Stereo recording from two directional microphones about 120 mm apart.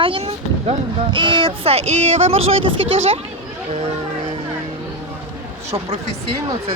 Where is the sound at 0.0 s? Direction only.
45° right (ahead or behind).